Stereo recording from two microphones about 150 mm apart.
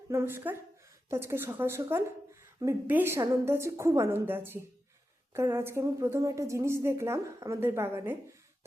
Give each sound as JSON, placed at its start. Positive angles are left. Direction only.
{"t": 0.1, "sound": "a woman's voice", "side_deg": -15}